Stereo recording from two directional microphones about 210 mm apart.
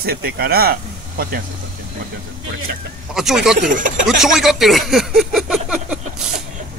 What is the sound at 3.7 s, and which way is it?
Speech, 40° right (ahead or behind).